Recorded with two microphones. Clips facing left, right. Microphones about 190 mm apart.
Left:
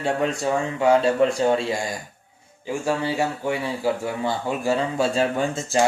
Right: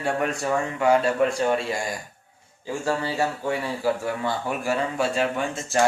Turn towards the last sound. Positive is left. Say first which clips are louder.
# left 3 dB
turn(degrees=35)  # may be behind; listen again after turning